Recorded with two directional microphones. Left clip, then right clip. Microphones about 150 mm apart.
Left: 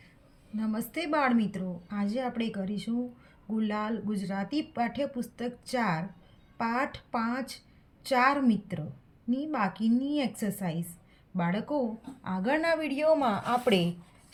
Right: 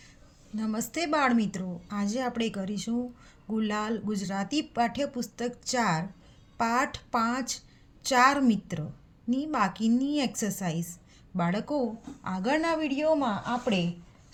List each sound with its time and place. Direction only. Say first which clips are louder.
0.5 s speech: right 1 dB; 40° right (ahead or behind)
12.8 s speech: right 1 dB; 5° left (ahead or behind)
13.1 s a woman's voice: left 3 dB; 15° left (ahead or behind)